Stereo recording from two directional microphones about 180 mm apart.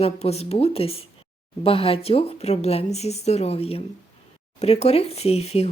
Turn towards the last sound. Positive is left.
turn(degrees=35)  # may be behind; listen again after turning